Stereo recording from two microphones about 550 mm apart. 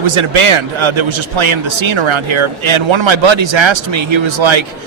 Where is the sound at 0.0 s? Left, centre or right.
Right.